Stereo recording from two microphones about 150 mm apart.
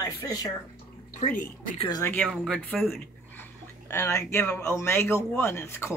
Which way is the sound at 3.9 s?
20° left (ahead or behind).